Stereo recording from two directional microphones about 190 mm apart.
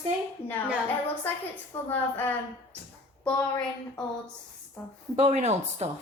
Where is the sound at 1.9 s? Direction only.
10° left (ahead or behind).